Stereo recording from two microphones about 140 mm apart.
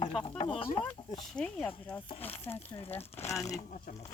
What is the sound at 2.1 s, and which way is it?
Speech, 45° left (ahead or behind).